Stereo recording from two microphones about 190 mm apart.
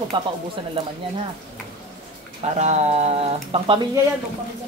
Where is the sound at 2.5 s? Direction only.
35° right (ahead or behind).